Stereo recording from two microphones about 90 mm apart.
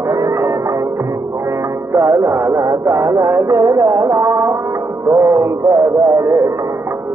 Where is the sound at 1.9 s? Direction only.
35° right (ahead or behind).